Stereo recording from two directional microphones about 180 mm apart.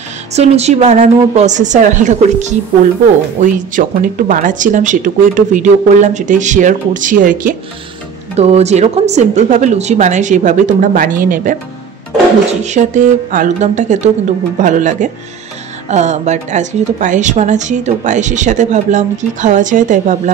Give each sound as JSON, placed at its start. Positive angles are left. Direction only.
{"t": 0.3, "sound": "a woman's voice", "side_deg": -35}
{"t": 8.4, "sound": "a woman's voice", "side_deg": -35}
{"t": 12.6, "sound": "a woman's voice", "side_deg": -40}